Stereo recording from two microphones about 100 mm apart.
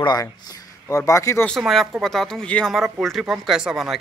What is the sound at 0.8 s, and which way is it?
Speech, 30° left (ahead or behind).